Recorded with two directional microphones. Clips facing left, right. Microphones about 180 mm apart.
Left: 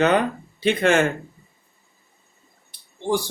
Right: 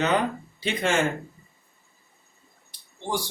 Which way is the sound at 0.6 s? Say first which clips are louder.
Left 6 dB; 60° left (ahead or behind).